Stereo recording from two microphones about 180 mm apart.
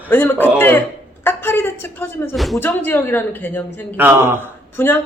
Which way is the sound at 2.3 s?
Centre (ahead or behind).